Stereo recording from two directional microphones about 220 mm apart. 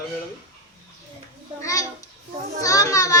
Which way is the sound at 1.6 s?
15° left (ahead or behind).